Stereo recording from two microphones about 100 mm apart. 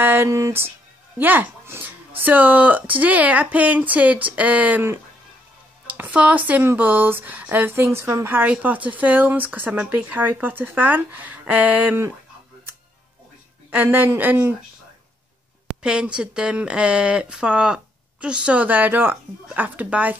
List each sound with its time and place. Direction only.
0.0 s speech: 20° right (ahead or behind)
13.7 s speech: 20° right (ahead or behind)
15.8 s speech: 10° right (ahead or behind)